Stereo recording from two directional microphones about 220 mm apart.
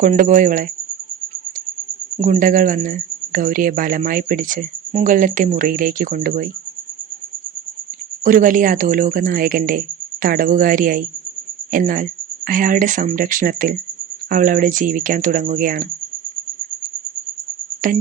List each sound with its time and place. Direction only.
0.0 s speech: 35° right (ahead or behind)
2.2 s speech: 35° right (ahead or behind)
8.2 s speech: 35° right (ahead or behind)